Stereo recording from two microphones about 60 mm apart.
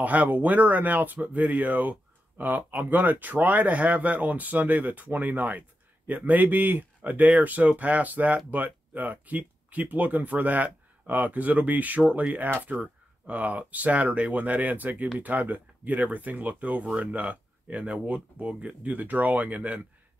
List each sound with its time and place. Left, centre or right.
0.0 s speech: right